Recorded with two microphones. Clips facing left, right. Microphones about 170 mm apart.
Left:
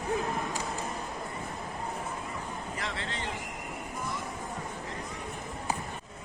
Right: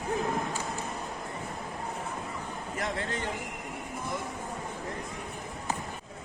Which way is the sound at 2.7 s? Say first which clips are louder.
Right 7 dB; 45° right (ahead or behind).